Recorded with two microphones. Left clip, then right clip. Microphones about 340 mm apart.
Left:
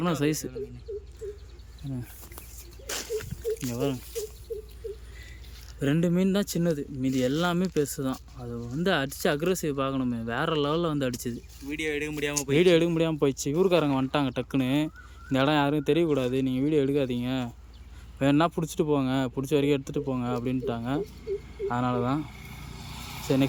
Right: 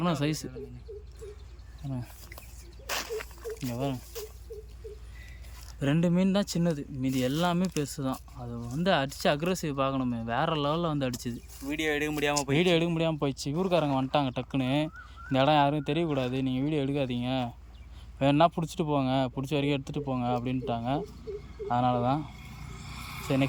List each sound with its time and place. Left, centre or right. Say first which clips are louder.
0.0 s speech: left 3 dB; centre
1.9 s a sound: left 1 dB; centre
5.8 s speech: left 2 dB; centre
11.6 s speech: right 1 dB; centre
12.5 s speech: left 8 dB; centre
22.8 s vehicle: left 1 dB; centre